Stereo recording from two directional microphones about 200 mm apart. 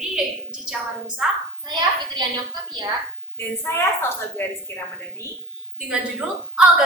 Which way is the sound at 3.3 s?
10° left (ahead or behind).